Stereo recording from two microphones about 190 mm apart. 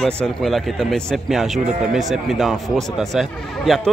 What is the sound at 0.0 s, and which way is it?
Speech, centre (ahead or behind).